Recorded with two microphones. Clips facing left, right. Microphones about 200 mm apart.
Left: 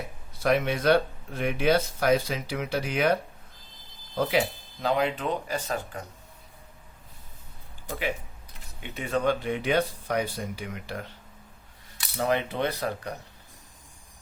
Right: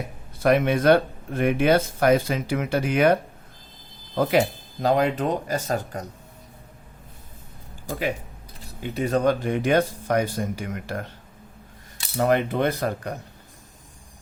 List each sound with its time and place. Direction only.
0.3 s speech: 55° right (ahead or behind)
4.2 s speech: 45° right (ahead or behind)
7.9 s speech: 40° right (ahead or behind)
12.2 s speech: 50° right (ahead or behind)